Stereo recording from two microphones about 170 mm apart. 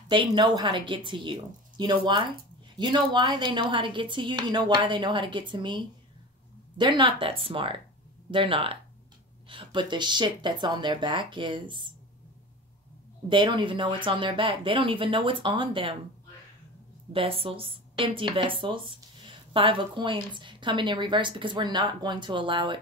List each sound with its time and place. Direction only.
0.1 s speech: 25° right (ahead or behind)
13.3 s speech: 25° right (ahead or behind)
17.1 s speech: 35° right (ahead or behind)